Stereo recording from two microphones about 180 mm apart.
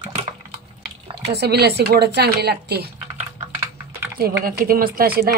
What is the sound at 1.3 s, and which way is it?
A woman's voice, 65° right (ahead or behind).